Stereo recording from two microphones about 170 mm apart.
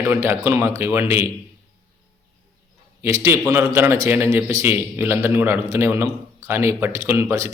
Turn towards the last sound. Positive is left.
turn(degrees=-15)  # may be behind; listen again after turning